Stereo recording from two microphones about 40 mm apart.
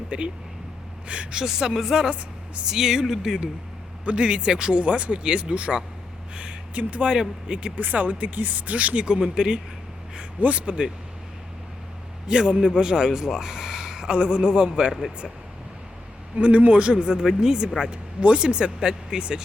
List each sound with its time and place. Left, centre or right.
0.1 s speech: right
1.4 s speech: centre
4.0 s speech: right
7.1 s speech: right
7.8 s speech: right
9.0 s speech: centre
10.4 s speech: right
12.3 s a man's voice: right
14.2 s speech: right
16.4 s speech: right
16.7 s speech: right
17.9 s speech: right